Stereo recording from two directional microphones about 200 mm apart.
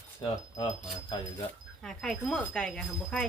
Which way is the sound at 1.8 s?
Centre (ahead or behind).